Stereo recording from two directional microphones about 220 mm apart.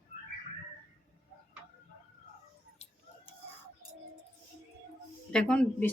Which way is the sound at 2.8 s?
30° left (ahead or behind).